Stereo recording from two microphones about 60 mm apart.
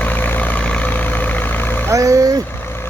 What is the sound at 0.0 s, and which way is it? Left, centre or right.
Vehicle, left.